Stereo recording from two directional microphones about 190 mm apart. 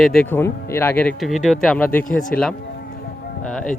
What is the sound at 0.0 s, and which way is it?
Speech, 5° left (ahead or behind).